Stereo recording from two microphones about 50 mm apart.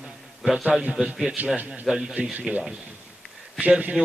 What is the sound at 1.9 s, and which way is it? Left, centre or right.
Speech, centre.